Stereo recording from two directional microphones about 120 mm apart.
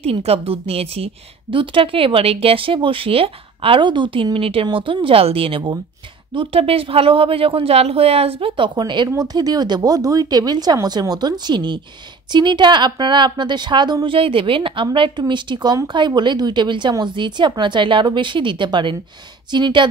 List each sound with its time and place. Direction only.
0.0 s a woman's voice: 55° right (ahead or behind)
4.6 s a woman's voice: 40° right (ahead or behind)